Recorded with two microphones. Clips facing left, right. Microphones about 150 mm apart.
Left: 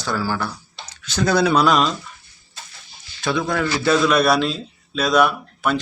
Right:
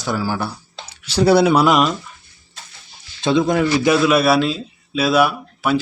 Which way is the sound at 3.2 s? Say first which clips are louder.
Right 5 dB; 20° right (ahead or behind).